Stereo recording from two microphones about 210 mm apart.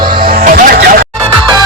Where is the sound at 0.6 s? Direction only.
45° right (ahead or behind).